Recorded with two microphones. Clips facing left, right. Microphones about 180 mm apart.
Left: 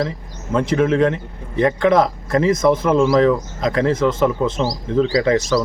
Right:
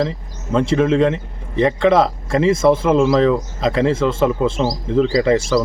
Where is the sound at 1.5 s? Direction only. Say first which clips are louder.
Right 1 dB; 25° right (ahead or behind).